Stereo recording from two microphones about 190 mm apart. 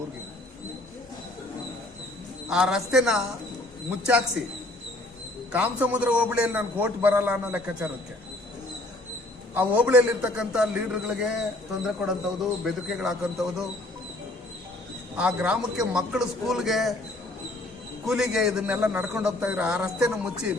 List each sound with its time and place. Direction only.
2.5 s a man's voice: 5° right (ahead or behind)
5.5 s a man's voice: 10° right (ahead or behind)
9.6 s a man's voice: 10° right (ahead or behind)
15.2 s a man's voice: 5° right (ahead or behind)
18.0 s a man's voice: centre (ahead or behind)